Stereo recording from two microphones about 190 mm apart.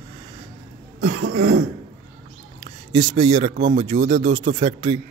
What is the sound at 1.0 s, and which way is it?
Cough, 80° right.